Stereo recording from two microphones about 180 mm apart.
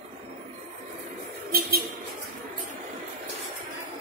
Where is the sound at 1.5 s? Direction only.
60° right (ahead or behind).